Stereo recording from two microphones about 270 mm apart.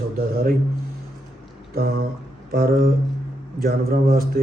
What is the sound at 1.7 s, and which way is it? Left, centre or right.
A man's voice, right.